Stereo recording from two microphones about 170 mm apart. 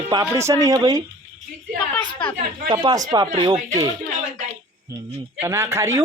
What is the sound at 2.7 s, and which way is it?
Speech, 25° right (ahead or behind).